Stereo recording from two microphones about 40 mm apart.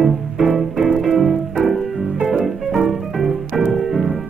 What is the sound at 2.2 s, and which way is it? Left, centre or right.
Music, right.